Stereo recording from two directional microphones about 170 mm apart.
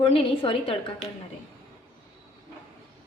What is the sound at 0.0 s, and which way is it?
Speech, 35° left (ahead or behind).